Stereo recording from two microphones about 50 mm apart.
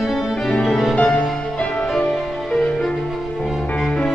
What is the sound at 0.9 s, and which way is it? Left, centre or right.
Music, left.